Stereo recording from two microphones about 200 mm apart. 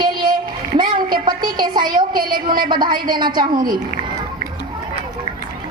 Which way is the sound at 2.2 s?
45° right (ahead or behind).